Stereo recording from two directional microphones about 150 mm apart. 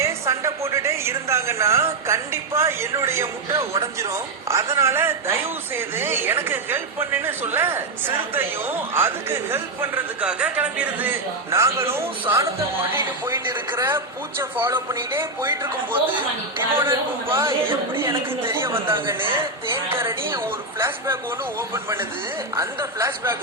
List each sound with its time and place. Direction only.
0.0 s a woman's voice: 20° right (ahead or behind)